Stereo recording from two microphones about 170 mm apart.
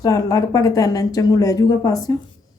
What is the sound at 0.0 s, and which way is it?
Speech, 20° left (ahead or behind).